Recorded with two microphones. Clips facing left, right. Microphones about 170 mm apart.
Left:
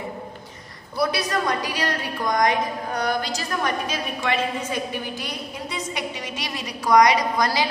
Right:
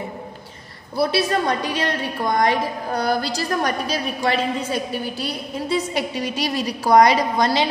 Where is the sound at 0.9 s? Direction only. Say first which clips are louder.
Right 4 dB; 30° right (ahead or behind).